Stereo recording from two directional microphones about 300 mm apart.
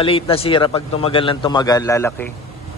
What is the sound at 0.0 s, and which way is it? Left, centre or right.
A man's voice, centre.